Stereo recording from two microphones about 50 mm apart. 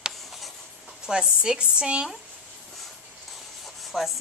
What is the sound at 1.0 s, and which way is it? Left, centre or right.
A woman's voice, centre.